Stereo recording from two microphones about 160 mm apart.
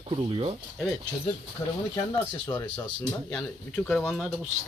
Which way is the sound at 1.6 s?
20° left (ahead or behind).